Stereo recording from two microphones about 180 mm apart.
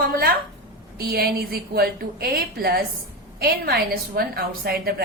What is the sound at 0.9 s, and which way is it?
A woman's voice, 60° right (ahead or behind).